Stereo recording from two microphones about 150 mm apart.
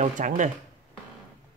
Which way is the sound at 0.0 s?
55° right (ahead or behind).